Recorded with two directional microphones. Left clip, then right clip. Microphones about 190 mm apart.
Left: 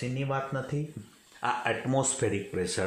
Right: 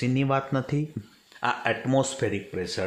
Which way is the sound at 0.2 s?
40° right (ahead or behind).